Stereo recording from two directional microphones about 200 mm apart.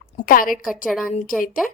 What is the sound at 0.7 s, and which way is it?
A woman's voice, centre (ahead or behind).